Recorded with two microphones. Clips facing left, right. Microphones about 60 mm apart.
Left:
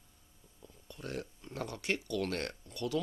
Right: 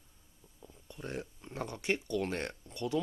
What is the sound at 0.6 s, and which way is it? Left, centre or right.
Speech, centre.